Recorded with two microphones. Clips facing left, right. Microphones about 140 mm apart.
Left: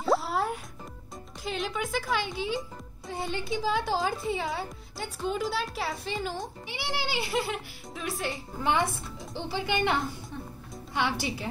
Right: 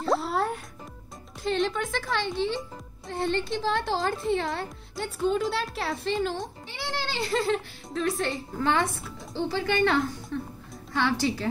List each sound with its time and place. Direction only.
0.0 s music: 5° left (ahead or behind)
1.4 s a woman's voice: 5° left (ahead or behind)
8.5 s speech: 15° left (ahead or behind)